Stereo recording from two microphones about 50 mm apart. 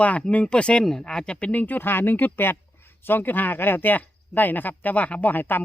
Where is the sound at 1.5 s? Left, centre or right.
Left.